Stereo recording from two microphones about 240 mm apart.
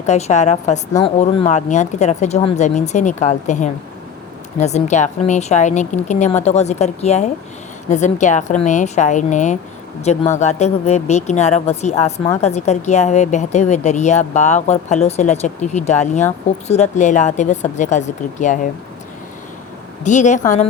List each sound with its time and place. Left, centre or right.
0.0 s speech: left
20.1 s speech: left